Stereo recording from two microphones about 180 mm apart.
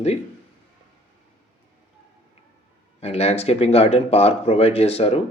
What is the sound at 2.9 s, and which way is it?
Speech, 35° left (ahead or behind).